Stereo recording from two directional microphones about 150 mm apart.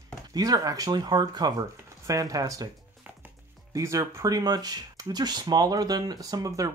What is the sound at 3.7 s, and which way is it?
Speech, 20° right (ahead or behind).